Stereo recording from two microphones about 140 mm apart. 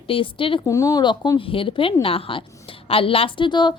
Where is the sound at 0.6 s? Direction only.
25° left (ahead or behind).